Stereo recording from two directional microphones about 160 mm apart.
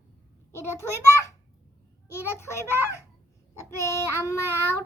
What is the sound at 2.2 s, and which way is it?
Speech, 15° left (ahead or behind).